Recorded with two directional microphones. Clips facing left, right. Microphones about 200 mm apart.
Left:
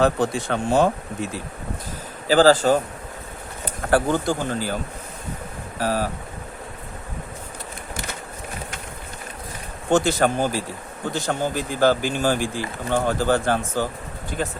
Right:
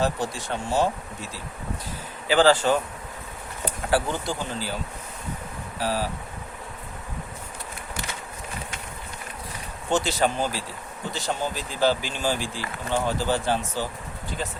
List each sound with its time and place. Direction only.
0.0 s speech: 60° left (ahead or behind)
2.2 s a man's voice: 40° left (ahead or behind)
3.8 s speech: 50° left (ahead or behind)
5.8 s speech: 50° left (ahead or behind)
9.9 s speech: 50° left (ahead or behind)